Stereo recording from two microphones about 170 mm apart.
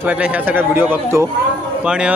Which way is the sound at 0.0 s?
10° right (ahead or behind).